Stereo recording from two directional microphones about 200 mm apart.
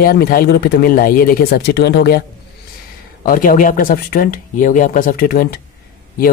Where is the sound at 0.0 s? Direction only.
50° left (ahead or behind).